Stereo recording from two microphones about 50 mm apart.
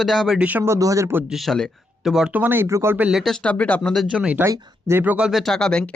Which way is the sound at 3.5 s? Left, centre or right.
Left.